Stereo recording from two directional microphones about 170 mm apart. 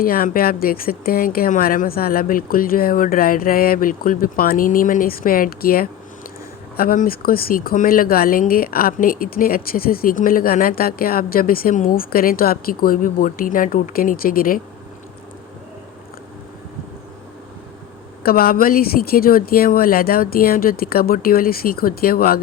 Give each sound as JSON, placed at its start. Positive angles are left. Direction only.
{"t": 0.0, "sound": "speech", "side_deg": 60}
{"t": 18.2, "sound": "speech", "side_deg": 60}